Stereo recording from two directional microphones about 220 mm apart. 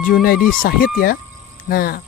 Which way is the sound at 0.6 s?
40° left (ahead or behind).